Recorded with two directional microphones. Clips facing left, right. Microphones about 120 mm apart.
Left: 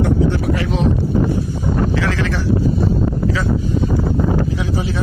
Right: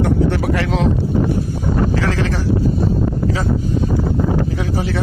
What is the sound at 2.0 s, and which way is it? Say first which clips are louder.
Speech: right 1 dB; 35° right (ahead or behind).